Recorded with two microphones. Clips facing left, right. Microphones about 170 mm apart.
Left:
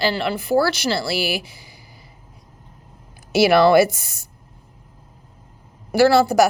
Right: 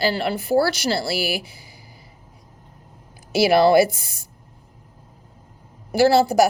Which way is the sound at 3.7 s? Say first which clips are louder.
Left 1 dB; 30° right (ahead or behind).